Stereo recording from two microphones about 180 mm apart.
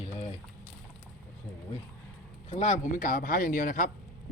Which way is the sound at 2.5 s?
40° left (ahead or behind).